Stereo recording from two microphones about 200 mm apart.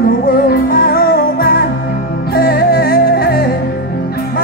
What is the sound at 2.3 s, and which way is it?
Music, 50° left (ahead or behind).